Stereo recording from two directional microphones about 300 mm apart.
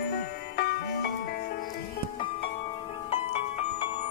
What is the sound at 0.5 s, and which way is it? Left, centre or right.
Music, left.